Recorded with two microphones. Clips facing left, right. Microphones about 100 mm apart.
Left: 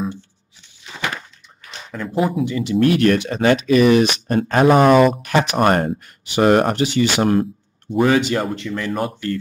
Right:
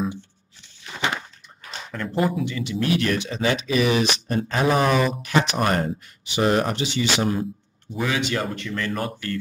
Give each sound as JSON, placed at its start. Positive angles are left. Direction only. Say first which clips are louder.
{"t": 1.0, "sound": "a sound", "louder": "even", "side_deg": -20}
{"t": 1.9, "sound": "speech", "louder": "left 3 dB", "side_deg": 5}
{"t": 2.5, "sound": "speech", "louder": "left 7 dB", "side_deg": 40}
{"t": 8.5, "sound": "speech", "louder": "left 4 dB", "side_deg": 20}